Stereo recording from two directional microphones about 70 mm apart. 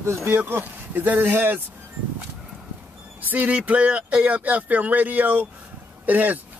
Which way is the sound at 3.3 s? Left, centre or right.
Right.